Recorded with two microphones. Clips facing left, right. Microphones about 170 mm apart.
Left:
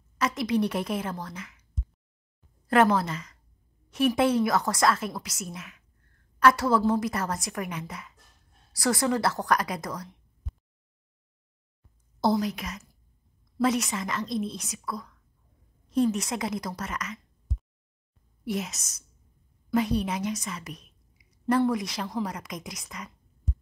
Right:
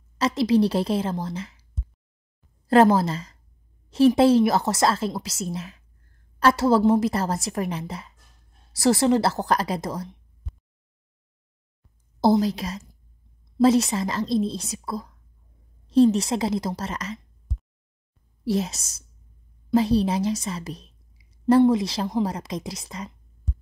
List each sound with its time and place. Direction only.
0.2 s a woman's voice: 30° right (ahead or behind)
10.4 s a sound: centre (ahead or behind)
12.2 s a woman's voice: 30° right (ahead or behind)
18.4 s a woman's voice: 30° right (ahead or behind)